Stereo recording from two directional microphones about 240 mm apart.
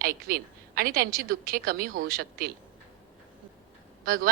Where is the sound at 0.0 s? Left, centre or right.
Right.